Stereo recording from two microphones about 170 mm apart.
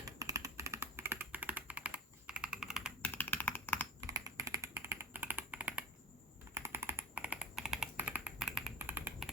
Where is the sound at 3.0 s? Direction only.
10° left (ahead or behind).